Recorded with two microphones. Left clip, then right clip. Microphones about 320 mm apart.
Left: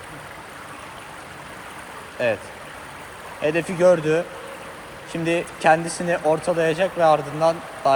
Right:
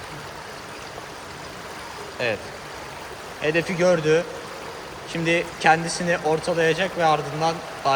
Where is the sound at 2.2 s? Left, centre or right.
Centre.